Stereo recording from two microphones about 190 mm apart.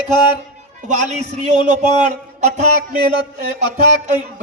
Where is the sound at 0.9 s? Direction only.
40° right (ahead or behind).